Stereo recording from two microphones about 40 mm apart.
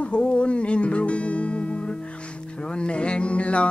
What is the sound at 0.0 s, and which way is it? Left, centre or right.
Music, left.